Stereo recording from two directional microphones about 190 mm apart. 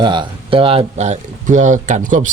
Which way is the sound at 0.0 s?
25° right (ahead or behind).